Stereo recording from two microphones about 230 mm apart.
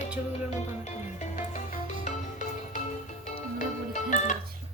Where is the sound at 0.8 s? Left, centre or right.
Left.